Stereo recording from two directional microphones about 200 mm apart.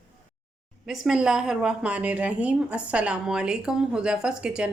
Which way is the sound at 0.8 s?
5° right (ahead or behind).